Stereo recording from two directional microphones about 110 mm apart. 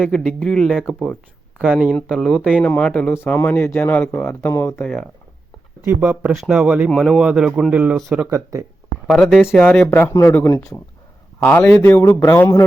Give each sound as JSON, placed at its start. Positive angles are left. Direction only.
{"t": 0.1, "sound": "speech", "side_deg": 5}
{"t": 2.0, "sound": "speech", "side_deg": 0}
{"t": 5.8, "sound": "speech", "side_deg": -20}
{"t": 8.3, "sound": "speech", "side_deg": -30}
{"t": 9.0, "sound": "speech", "side_deg": 0}
{"t": 9.5, "sound": "speech", "side_deg": 10}
{"t": 10.1, "sound": "speech", "side_deg": 25}
{"t": 12.2, "sound": "speech", "side_deg": 30}